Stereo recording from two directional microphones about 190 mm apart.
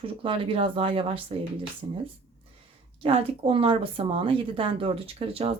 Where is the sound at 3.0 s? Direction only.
30° right (ahead or behind).